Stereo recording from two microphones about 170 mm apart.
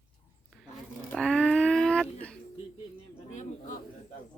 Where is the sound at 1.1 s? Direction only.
5° left (ahead or behind).